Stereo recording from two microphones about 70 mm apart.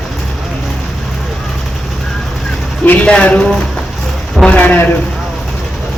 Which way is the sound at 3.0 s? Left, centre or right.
Centre.